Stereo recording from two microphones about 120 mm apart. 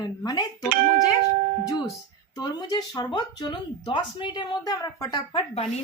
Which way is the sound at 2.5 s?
35° left (ahead or behind).